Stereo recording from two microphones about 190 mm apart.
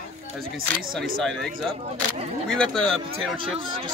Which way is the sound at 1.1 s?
Centre (ahead or behind).